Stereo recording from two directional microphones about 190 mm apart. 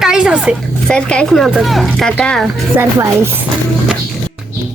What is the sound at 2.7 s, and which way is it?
Speech, 15° right (ahead or behind).